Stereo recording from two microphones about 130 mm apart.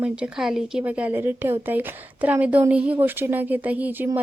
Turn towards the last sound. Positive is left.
turn(degrees=-10)  # may be behind; listen again after turning